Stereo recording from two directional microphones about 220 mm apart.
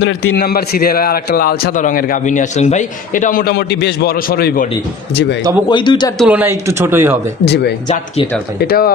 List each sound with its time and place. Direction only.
0.0 s a man's voice: 45° left (ahead or behind)
5.7 s speech: 20° left (ahead or behind)
6.1 s speech: 5° right (ahead or behind)
7.4 s a man's voice: 50° left (ahead or behind)